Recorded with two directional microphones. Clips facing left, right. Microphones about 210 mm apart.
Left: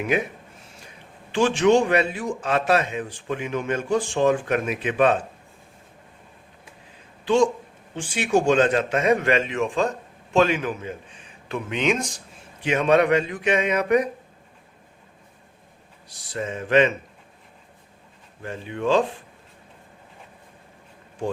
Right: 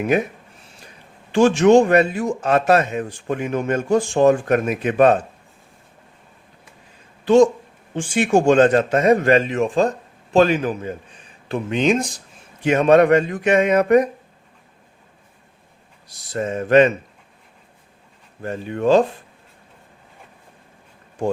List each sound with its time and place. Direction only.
1.3 s a man's voice: 45° right (ahead or behind)
7.3 s a man's voice: 40° right (ahead or behind)
12.6 s a man's voice: 45° right (ahead or behind)
16.0 s a man's voice: 40° right (ahead or behind)
18.4 s a man's voice: 45° right (ahead or behind)